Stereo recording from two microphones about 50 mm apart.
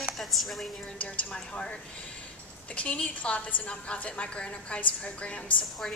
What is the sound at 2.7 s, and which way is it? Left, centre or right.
A woman's voice, left.